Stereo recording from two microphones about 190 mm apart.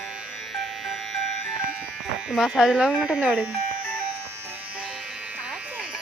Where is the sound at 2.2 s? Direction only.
Centre (ahead or behind).